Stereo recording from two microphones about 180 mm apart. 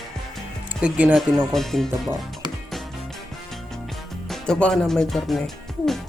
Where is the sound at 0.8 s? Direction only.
5° right (ahead or behind).